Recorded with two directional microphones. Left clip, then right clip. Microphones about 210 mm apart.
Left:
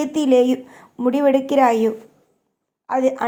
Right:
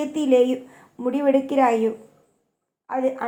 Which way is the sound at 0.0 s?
40° left (ahead or behind).